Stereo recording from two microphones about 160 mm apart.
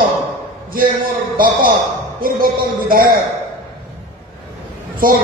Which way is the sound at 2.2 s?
65° right (ahead or behind).